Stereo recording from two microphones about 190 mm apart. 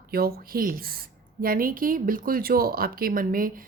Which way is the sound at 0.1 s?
50° right (ahead or behind).